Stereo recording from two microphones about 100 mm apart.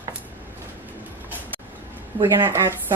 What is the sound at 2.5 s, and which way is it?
Speech, 25° right (ahead or behind).